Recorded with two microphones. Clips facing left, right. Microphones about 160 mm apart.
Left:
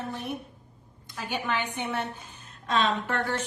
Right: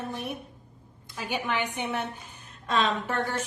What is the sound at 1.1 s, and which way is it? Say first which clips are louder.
Speech: even; 15° right (ahead or behind).